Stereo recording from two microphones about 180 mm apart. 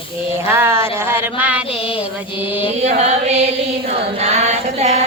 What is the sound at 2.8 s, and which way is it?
Chant, 40° right (ahead or behind).